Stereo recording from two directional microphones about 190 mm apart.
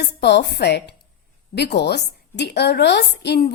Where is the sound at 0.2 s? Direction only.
65° left (ahead or behind).